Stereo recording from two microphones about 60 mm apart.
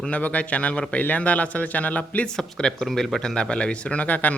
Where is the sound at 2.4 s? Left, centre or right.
Centre.